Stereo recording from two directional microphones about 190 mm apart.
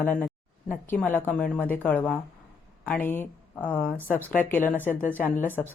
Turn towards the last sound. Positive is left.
turn(degrees=10)  # may be behind; listen again after turning